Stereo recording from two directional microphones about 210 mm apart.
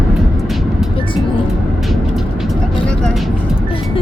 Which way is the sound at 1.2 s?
25° left (ahead or behind).